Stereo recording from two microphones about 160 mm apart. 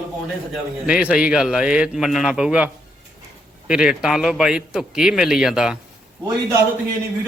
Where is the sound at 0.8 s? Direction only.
10° right (ahead or behind).